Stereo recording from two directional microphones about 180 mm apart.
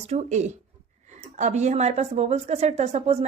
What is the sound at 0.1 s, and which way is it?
Speech, 40° right (ahead or behind).